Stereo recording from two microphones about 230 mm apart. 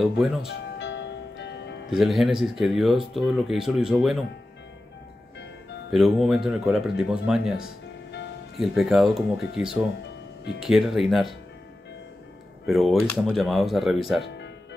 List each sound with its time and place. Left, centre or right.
0.0 s speech: centre
0.5 s music: left
1.9 s speech: centre
5.9 s speech: centre
8.5 s speech: centre
12.6 s speech: centre